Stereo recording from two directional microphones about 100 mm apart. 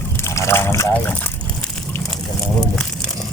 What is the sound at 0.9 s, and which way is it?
Speech, 20° left (ahead or behind).